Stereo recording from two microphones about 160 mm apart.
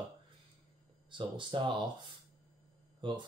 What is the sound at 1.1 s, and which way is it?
Speech, 30° right (ahead or behind).